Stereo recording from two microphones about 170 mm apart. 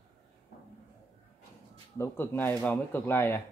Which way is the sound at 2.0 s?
10° left (ahead or behind).